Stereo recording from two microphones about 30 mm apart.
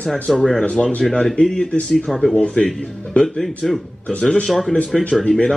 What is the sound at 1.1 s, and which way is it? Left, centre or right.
Speech, left.